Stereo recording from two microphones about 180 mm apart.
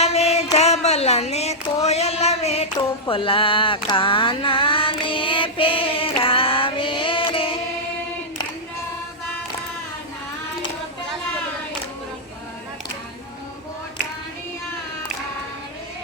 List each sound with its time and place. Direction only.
0.0 s music: 35° left (ahead or behind)
0.5 s child singing: 35° left (ahead or behind)
2.7 s mantra: 30° left (ahead or behind)